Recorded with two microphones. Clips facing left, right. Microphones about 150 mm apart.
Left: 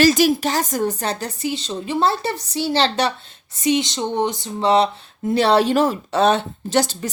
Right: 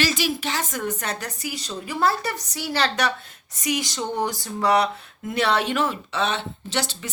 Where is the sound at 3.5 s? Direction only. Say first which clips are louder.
Left 7 dB; 25° left (ahead or behind).